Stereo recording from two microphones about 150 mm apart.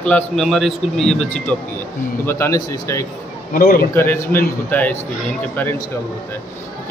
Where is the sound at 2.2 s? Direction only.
20° left (ahead or behind).